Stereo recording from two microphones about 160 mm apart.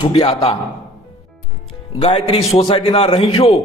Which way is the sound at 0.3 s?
40° left (ahead or behind).